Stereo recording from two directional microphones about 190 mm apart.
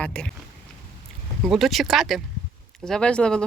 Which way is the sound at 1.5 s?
Centre (ahead or behind).